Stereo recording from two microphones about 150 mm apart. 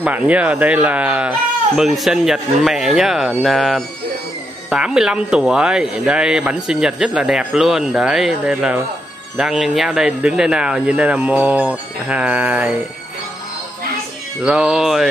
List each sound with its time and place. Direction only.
0.0 s speech: 10° right (ahead or behind)
14.4 s speech: 5° right (ahead or behind)